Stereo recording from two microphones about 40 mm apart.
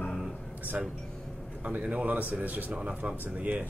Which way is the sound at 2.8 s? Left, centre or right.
Right.